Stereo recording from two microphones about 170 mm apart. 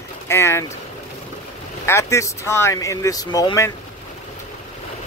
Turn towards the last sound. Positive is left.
turn(degrees=20)  # may be behind; listen again after turning